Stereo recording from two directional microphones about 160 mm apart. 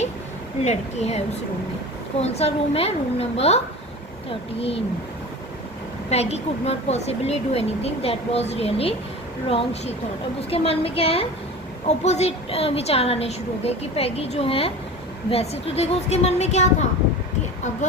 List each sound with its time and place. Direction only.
0.6 s speech: 45° left (ahead or behind)
6.1 s speech: 40° left (ahead or behind)